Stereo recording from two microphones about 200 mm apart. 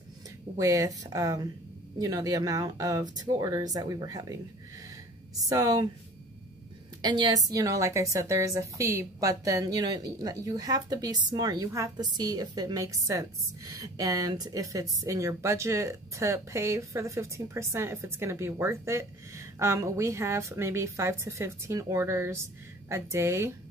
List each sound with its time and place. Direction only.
0.6 s a woman's voice: 15° right (ahead or behind)
5.5 s speech: 20° right (ahead or behind)
7.0 s a woman's voice: 20° right (ahead or behind)